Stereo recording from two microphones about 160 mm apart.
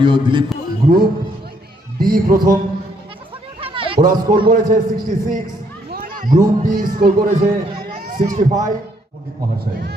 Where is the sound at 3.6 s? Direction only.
35° right (ahead or behind).